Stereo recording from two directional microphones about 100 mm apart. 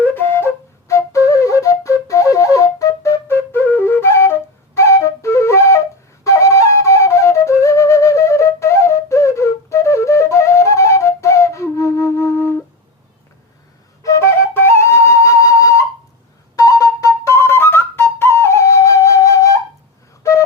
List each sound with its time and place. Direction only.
0.0 s flute: 20° left (ahead or behind)
14.0 s flute: 30° left (ahead or behind)
20.2 s a sound: 30° left (ahead or behind)